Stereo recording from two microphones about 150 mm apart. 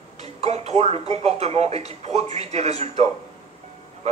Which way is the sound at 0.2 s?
45° right (ahead or behind).